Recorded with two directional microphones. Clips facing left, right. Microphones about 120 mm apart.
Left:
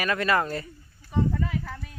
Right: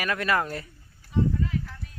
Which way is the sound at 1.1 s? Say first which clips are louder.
Even; 85° left.